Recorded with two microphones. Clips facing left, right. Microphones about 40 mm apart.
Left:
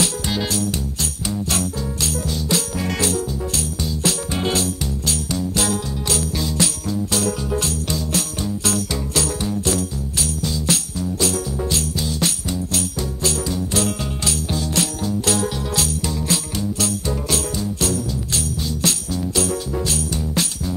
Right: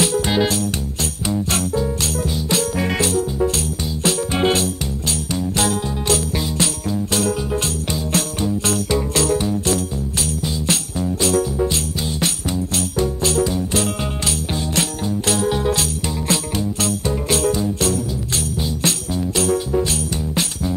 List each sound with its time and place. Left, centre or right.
0.0 s music: right
5.3 s jingle bell: right
10.4 s jingle bell: right
11.6 s music: right
19.8 s music: centre